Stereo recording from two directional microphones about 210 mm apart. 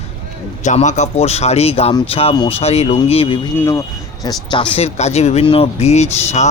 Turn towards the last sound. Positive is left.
turn(degrees=30)  # may be behind; listen again after turning